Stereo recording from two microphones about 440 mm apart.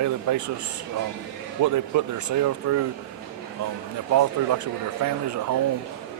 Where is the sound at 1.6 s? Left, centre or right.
Right.